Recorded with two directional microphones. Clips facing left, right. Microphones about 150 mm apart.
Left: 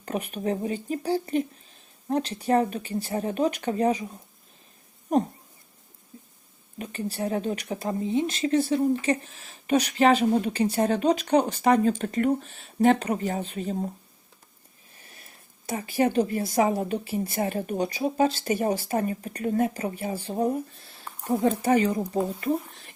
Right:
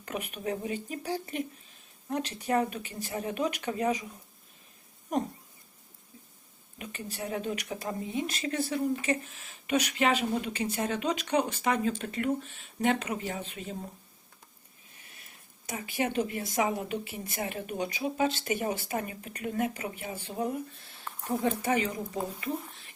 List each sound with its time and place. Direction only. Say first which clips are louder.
0.0 s speech: left 6 dB; 35° left (ahead or behind)
6.7 s speech: left 8 dB; 35° left (ahead or behind)
15.6 s speech: left 7 dB; 35° left (ahead or behind)